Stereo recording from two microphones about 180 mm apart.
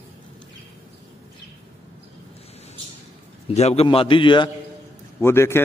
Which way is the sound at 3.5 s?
35° left (ahead or behind).